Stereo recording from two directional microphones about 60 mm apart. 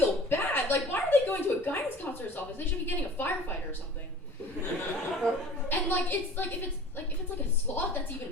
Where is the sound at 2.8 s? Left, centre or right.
Left.